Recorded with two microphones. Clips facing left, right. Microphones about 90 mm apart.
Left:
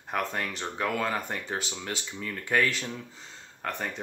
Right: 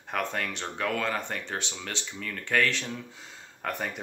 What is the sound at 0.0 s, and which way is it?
Speech, 5° left (ahead or behind).